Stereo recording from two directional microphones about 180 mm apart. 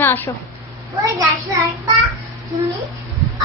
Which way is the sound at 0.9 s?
20° right (ahead or behind).